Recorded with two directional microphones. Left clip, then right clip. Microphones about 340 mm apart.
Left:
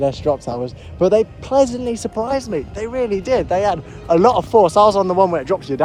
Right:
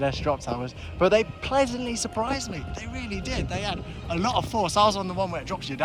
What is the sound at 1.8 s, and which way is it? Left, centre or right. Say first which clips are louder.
Speech: left 8 dB; centre.